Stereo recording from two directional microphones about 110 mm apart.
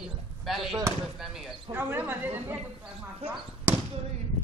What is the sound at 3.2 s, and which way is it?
Speech, 65° right (ahead or behind).